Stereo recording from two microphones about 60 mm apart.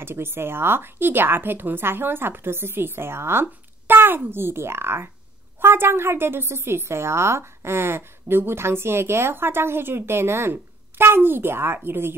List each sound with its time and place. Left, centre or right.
0.0 s a woman's voice: right